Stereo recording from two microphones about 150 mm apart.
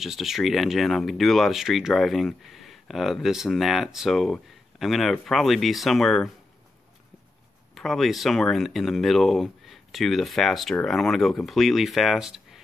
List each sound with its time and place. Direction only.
0.0 s speech: centre (ahead or behind)
7.7 s speech: centre (ahead or behind)